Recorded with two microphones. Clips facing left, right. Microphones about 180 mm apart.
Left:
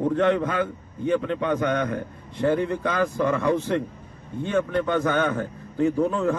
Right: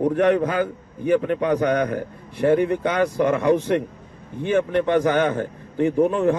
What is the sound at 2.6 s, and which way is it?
A man's voice, 20° right (ahead or behind).